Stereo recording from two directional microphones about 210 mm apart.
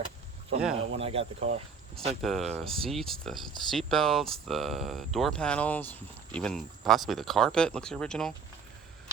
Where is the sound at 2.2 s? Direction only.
Centre (ahead or behind).